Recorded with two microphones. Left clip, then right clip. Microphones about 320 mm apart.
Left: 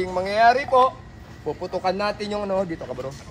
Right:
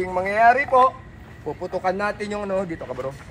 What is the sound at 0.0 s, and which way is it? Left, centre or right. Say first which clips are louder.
A man's voice: right 1 dB; centre.